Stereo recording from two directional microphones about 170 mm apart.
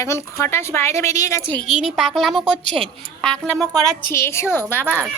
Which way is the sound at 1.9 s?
Centre (ahead or behind).